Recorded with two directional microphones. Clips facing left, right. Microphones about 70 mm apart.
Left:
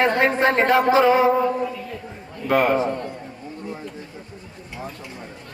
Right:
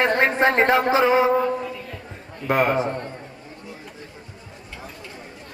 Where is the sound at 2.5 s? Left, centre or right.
Right.